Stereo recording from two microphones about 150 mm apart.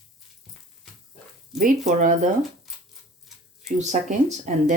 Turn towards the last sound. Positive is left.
turn(degrees=-55)  # may be behind; listen again after turning